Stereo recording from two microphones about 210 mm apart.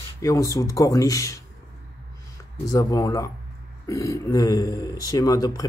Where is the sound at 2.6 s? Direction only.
15° left (ahead or behind).